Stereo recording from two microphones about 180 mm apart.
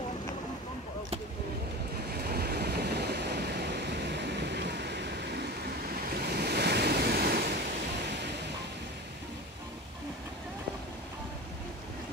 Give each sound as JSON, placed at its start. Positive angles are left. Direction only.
{"t": 2.2, "sound": "waves", "side_deg": -60}